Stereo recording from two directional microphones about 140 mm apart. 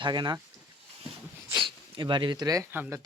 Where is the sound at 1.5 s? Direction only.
35° right (ahead or behind).